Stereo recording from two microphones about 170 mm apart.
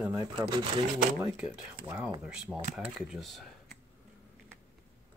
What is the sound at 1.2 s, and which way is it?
Speech, 10° right (ahead or behind).